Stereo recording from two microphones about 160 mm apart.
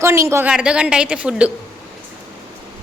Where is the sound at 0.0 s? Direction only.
15° right (ahead or behind).